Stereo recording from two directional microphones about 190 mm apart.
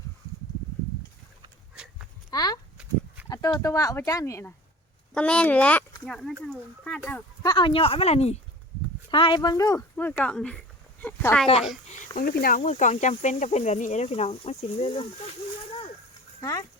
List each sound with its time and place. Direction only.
2.3 s speech: 20° left (ahead or behind)
7.4 s speech: 25° left (ahead or behind); by 11.4 s 10° left (ahead or behind)
11.9 s speech: 45° left (ahead or behind)
16.4 s speech: 15° left (ahead or behind)